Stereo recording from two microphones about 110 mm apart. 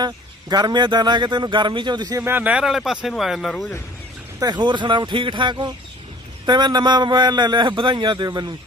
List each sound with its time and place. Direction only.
0.0 s a man's voice: 40° right (ahead or behind)
2.2 s speech: 15° right (ahead or behind)
4.4 s a man's voice: 40° right (ahead or behind)